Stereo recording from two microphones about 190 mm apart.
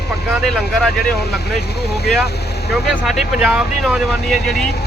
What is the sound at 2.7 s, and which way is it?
Speech, centre (ahead or behind).